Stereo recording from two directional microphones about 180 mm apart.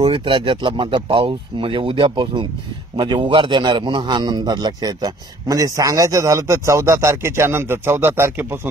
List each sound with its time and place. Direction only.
0.0 s a man's voice: 30° right (ahead or behind); by 8.5 s 15° right (ahead or behind)